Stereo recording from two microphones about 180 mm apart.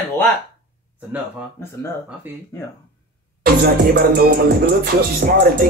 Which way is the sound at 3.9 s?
60° right (ahead or behind).